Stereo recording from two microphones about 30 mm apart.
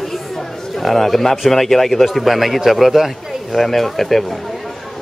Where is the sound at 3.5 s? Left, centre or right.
Centre.